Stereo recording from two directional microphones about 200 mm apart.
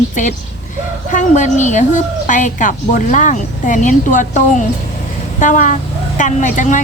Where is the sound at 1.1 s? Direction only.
40° left (ahead or behind).